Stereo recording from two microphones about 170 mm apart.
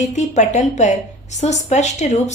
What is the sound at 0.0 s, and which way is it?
A woman's voice, 45° left (ahead or behind).